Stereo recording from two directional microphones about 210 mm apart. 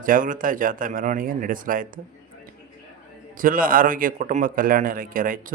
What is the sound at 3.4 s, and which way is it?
Speech, 40° right (ahead or behind).